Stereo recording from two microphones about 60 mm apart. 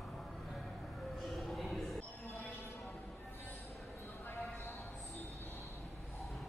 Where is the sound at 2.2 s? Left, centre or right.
Left.